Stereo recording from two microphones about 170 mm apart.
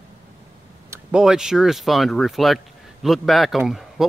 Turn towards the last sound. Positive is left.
turn(degrees=0)  # may be behind; listen again after turning